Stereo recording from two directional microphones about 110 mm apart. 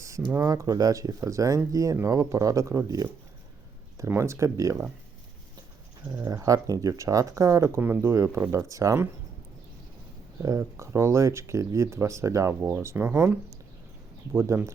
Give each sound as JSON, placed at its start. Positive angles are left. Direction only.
{"t": 0.3, "sound": "speech", "side_deg": -30}
{"t": 6.1, "sound": "speech", "side_deg": -25}
{"t": 7.8, "sound": "speech", "side_deg": -15}
{"t": 10.4, "sound": "speech", "side_deg": -30}